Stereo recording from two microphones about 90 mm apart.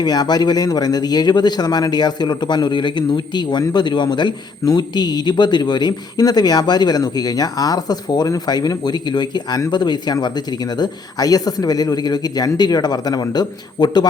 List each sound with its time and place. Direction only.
0.0 s a man's voice: 50° left (ahead or behind)